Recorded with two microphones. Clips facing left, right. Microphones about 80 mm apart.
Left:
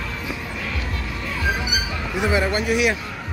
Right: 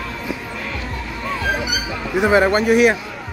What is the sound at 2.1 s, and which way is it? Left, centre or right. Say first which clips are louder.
Speech: right 7 dB; right.